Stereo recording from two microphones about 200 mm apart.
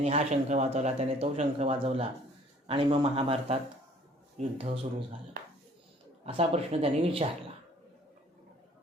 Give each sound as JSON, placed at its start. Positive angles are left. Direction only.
{"t": 0.0, "sound": "speech", "side_deg": -30}
{"t": 5.4, "sound": "hands", "side_deg": -50}
{"t": 6.2, "sound": "speech", "side_deg": -30}